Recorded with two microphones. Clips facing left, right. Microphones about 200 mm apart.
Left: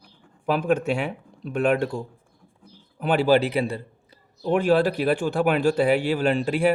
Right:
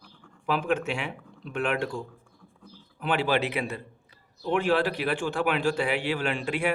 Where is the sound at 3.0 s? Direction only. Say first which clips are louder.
Left 7 dB; 40° left (ahead or behind).